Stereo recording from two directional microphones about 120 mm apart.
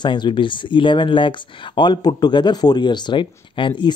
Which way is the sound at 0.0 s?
40° left (ahead or behind).